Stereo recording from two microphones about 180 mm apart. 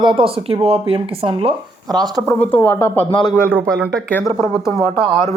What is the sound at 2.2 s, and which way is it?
Speech, 10° left (ahead or behind).